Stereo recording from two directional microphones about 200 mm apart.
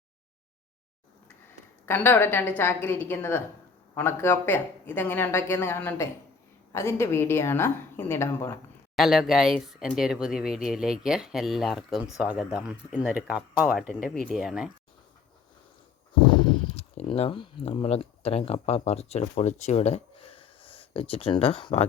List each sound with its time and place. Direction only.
1.9 s a woman's voice: 10° left (ahead or behind)
9.0 s speech: centre (ahead or behind)
16.2 s speech: 25° left (ahead or behind)